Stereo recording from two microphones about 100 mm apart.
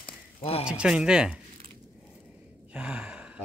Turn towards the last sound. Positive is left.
turn(degrees=-10)  # may be behind; listen again after turning